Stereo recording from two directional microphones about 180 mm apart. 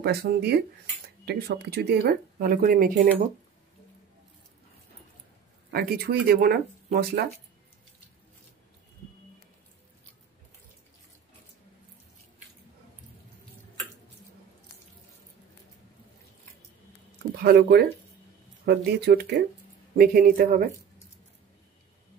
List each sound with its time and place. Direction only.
0.0 s speech: 65° right (ahead or behind)
5.7 s speech: 60° right (ahead or behind)
17.4 s speech: 65° right (ahead or behind)
20.0 s speech: 55° right (ahead or behind)